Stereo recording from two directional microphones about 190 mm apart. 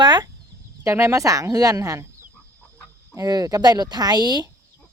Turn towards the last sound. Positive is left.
turn(degrees=-20)  # may be behind; listen again after turning